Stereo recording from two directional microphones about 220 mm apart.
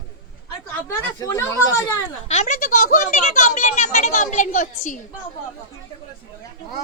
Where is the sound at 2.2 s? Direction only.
30° left (ahead or behind).